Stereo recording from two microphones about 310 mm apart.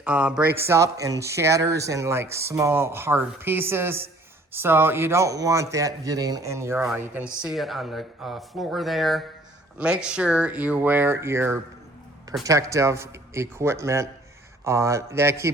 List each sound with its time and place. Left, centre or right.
0.0 s speech: centre